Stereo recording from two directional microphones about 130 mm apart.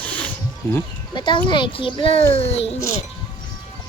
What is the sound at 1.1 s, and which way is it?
A child's voice, 35° left (ahead or behind).